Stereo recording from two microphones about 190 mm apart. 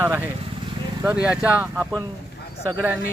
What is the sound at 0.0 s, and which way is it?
Speech, 10° right (ahead or behind).